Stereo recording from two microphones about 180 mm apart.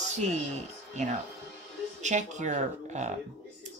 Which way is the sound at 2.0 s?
40° right (ahead or behind).